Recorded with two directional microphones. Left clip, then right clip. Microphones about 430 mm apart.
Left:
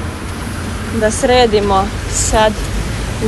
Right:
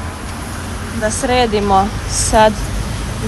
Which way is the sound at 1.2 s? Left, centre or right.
Centre.